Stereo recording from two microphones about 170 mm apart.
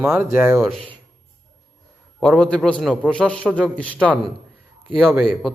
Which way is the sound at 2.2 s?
5° left (ahead or behind).